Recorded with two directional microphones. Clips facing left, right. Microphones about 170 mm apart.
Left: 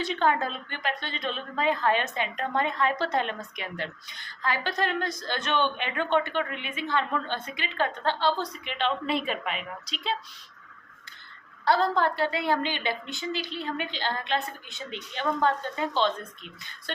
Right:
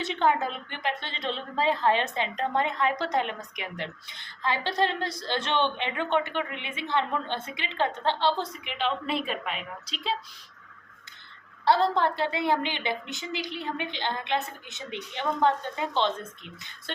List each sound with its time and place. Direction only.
0.0 s a woman's voice: 20° right (ahead or behind)
8.6 s a woman's voice: 5° right (ahead or behind)
11.6 s a woman's voice: 25° right (ahead or behind)